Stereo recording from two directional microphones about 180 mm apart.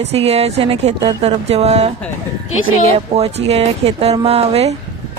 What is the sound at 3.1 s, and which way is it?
Speech, 35° right (ahead or behind).